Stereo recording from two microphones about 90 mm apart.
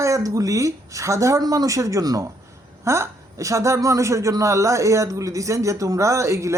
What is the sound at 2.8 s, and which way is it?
A woman's voice, 30° right (ahead or behind).